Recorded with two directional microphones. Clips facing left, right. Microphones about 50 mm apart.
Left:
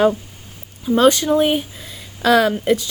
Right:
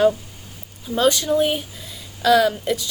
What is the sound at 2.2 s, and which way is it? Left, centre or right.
Speech, left.